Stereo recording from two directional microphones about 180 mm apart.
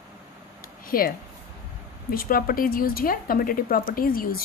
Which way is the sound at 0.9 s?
55° left (ahead or behind).